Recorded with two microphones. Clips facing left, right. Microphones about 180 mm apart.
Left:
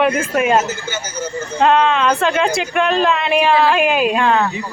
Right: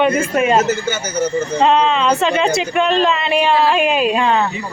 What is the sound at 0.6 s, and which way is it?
Speech, 65° right (ahead or behind).